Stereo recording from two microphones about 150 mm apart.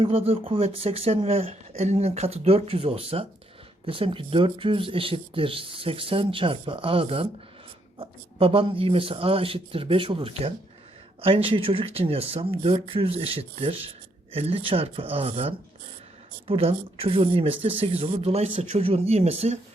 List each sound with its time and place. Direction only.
0.0 s speech: 40° right (ahead or behind)